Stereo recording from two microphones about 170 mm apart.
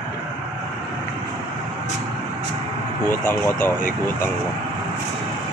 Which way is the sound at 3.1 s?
15° left (ahead or behind).